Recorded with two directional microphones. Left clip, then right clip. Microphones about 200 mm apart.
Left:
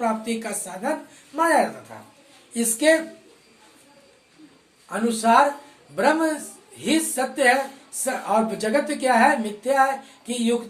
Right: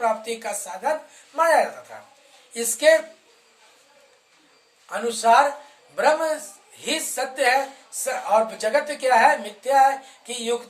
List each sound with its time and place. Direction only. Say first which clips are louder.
0.0 s speech: right 1 dB; 15° right (ahead or behind)
2.5 s a woman's voice: right 2 dB; 15° right (ahead or behind)
4.9 s speech: right 1 dB; 15° right (ahead or behind)